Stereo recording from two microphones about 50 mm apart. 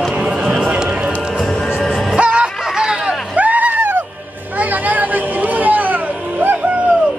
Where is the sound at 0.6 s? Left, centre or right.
Right.